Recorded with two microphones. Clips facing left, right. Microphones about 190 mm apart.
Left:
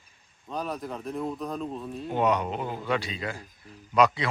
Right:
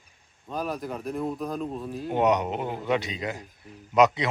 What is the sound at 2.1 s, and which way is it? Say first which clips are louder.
Speech: right 2 dB; 20° right (ahead or behind).